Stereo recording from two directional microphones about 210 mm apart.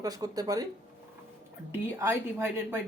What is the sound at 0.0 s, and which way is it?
Speech, 15° right (ahead or behind).